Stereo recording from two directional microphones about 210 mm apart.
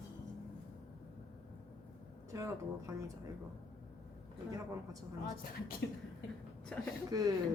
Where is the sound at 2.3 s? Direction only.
15° right (ahead or behind).